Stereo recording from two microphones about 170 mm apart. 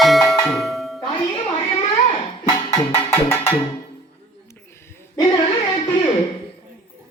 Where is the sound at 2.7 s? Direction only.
15° left (ahead or behind).